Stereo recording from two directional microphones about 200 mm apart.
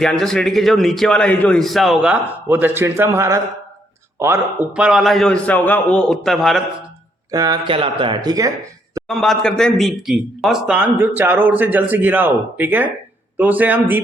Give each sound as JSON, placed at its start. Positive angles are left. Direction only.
{"t": 0.0, "sound": "a man's voice", "side_deg": 5}
{"t": 7.3, "sound": "speech", "side_deg": -20}
{"t": 9.0, "sound": "speech", "side_deg": 0}